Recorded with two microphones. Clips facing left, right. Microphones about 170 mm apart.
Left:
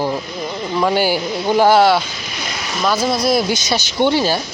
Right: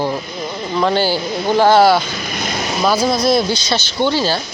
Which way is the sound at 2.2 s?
50° right (ahead or behind).